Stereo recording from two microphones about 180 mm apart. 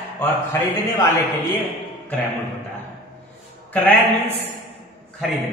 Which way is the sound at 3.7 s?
10° left (ahead or behind).